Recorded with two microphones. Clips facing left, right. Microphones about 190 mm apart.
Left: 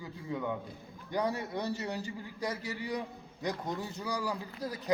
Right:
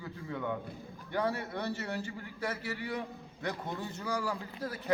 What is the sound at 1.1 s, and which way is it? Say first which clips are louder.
A man's voice: left 1 dB; 15° left (ahead or behind).